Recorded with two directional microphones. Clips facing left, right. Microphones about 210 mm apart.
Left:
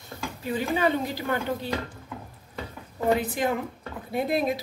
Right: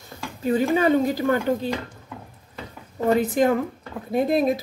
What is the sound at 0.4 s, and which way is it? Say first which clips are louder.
A woman's voice: right 6 dB; 45° right (ahead or behind).